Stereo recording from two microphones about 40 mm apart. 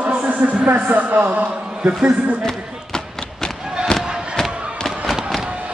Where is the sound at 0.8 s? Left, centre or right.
Right.